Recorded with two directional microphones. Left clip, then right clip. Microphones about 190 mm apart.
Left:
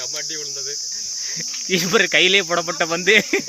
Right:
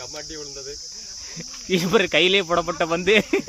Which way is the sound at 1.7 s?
10° right (ahead or behind).